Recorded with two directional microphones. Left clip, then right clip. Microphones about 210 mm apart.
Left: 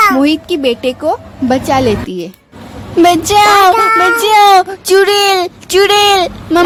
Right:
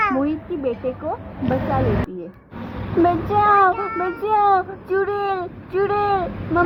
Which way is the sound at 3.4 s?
65° left (ahead or behind).